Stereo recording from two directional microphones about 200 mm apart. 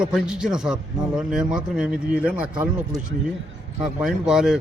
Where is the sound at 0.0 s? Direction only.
5° right (ahead or behind).